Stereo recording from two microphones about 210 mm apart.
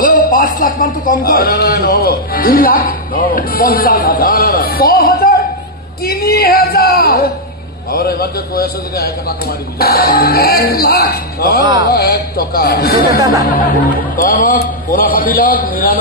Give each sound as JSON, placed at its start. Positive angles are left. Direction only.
{"t": 0.0, "sound": "a man's voice", "side_deg": 40}
{"t": 11.6, "sound": "speech", "side_deg": -20}
{"t": 11.9, "sound": "a man's voice", "side_deg": 45}
{"t": 13.2, "sound": "speech", "side_deg": -15}
{"t": 13.9, "sound": "a man's voice", "side_deg": 40}